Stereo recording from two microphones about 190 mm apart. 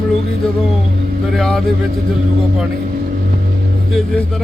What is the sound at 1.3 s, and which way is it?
Speech, centre (ahead or behind).